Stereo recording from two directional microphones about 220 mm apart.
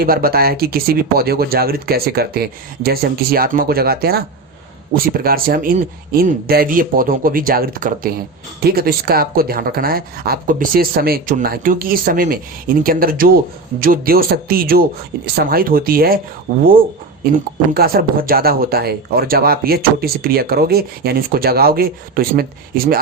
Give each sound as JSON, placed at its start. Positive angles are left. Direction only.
{"t": 0.0, "sound": "speech", "side_deg": -45}
{"t": 17.7, "sound": "speech", "side_deg": -45}